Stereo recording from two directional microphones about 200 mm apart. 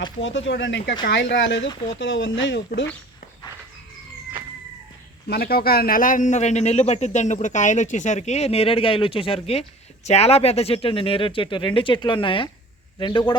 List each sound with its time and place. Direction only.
0.0 s speech: 70° left (ahead or behind)
5.3 s a man's voice: 50° left (ahead or behind); by 13.3 s 25° left (ahead or behind)